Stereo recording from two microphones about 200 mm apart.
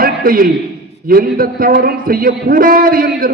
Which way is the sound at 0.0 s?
45° right (ahead or behind).